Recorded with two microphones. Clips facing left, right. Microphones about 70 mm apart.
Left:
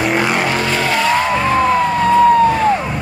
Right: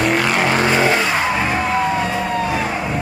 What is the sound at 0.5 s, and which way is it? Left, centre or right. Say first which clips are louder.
Vehicle: right 1 dB; right.